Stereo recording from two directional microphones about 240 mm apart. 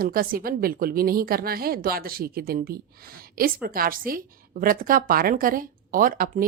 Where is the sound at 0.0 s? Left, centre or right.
Right.